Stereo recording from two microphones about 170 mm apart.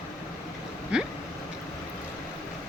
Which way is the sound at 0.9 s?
5° right (ahead or behind).